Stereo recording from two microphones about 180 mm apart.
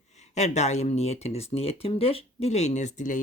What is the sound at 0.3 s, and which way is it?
Speech, 40° left (ahead or behind).